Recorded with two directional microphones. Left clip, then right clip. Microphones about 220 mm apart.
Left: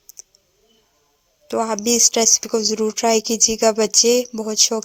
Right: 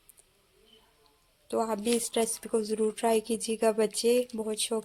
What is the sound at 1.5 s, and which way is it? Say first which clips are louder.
Speech: left 9 dB; 25° left (ahead or behind).